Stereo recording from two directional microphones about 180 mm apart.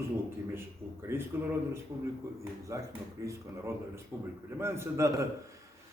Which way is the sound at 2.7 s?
15° right (ahead or behind).